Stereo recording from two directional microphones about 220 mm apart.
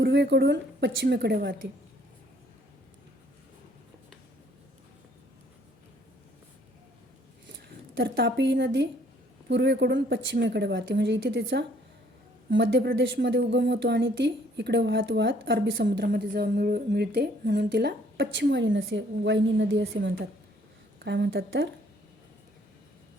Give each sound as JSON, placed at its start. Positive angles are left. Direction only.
{"t": 0.0, "sound": "speech", "side_deg": -50}
{"t": 7.9, "sound": "speech", "side_deg": -45}
{"t": 20.0, "sound": "speech", "side_deg": -45}